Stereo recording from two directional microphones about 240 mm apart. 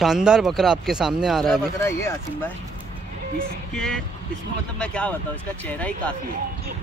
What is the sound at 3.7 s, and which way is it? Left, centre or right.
Speech, centre.